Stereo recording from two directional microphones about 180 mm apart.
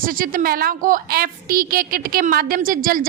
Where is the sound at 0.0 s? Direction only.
50° right (ahead or behind).